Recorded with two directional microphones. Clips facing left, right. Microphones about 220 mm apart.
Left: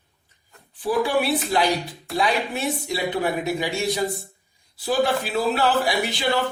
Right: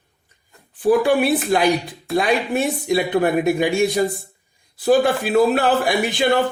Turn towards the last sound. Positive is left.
turn(degrees=-50)  # may be behind; listen again after turning